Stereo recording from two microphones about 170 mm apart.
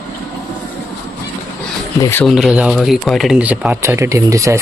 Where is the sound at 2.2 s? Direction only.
Centre (ahead or behind); by 4.6 s 20° right (ahead or behind).